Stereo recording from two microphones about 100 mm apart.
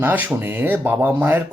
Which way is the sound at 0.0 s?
20° right (ahead or behind).